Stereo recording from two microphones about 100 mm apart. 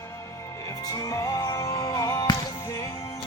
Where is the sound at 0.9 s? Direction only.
35° left (ahead or behind).